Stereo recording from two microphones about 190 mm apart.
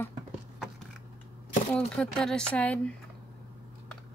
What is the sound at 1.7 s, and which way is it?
Speech, 5° left (ahead or behind).